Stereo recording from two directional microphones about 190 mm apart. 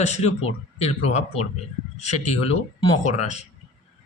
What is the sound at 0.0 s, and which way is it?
Speech, 35° left (ahead or behind).